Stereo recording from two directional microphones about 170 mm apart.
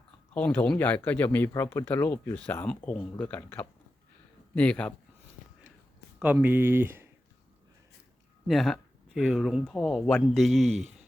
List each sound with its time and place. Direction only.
0.3 s speech: 10° left (ahead or behind)
6.1 s speech: 10° right (ahead or behind)
8.4 s speech: centre (ahead or behind)
10.6 s speech: 40° right (ahead or behind)